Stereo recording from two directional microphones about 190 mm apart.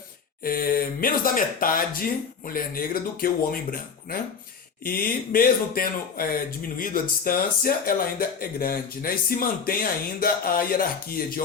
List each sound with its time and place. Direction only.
0.4 s speech: 50° left (ahead or behind)